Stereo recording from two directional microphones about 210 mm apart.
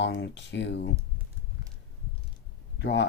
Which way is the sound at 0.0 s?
55° left (ahead or behind).